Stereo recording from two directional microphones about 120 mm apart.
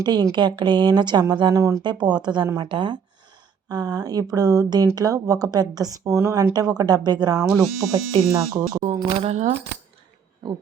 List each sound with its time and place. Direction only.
0.0 s speech: 35° right (ahead or behind)
8.8 s speech: 65° right (ahead or behind)